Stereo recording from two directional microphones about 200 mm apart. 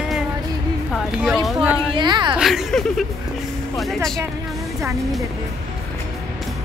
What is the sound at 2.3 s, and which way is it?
A woman's voice, centre (ahead or behind).